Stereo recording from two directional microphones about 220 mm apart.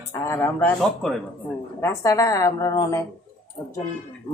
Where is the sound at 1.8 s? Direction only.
15° left (ahead or behind).